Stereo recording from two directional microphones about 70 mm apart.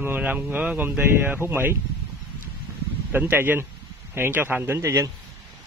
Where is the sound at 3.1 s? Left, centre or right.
Right.